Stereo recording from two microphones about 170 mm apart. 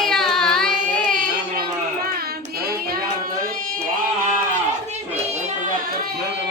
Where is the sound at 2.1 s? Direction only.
65° right (ahead or behind).